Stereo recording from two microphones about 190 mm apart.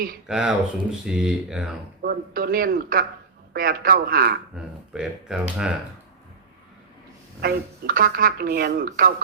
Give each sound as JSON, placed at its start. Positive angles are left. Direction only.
{"t": 0.3, "sound": "speech", "side_deg": -5}
{"t": 2.0, "sound": "a woman's voice", "side_deg": -50}
{"t": 4.5, "sound": "speech", "side_deg": -5}
{"t": 7.4, "sound": "a woman's voice", "side_deg": -50}